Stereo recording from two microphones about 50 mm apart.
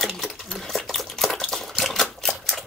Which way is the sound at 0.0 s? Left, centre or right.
Centre.